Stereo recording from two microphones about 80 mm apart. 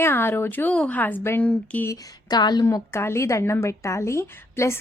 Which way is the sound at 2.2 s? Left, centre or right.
Left.